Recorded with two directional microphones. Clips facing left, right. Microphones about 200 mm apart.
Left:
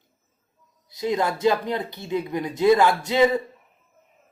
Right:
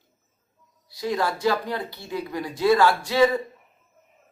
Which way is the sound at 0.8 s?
20° left (ahead or behind).